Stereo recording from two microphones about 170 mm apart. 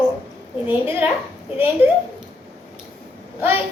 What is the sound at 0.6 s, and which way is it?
Speech, 10° right (ahead or behind).